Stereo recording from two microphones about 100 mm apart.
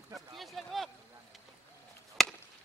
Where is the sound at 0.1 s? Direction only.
Centre (ahead or behind).